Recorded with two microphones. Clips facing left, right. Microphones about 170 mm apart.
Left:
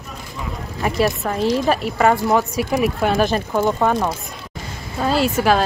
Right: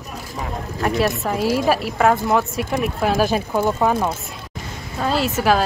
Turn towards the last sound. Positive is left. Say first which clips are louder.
# left 1 dB
turn(degrees=0)  # may be behind; listen again after turning